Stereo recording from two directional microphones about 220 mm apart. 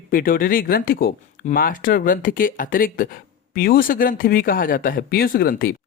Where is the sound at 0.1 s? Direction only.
40° left (ahead or behind).